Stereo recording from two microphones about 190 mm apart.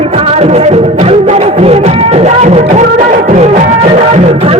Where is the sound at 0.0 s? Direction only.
30° right (ahead or behind).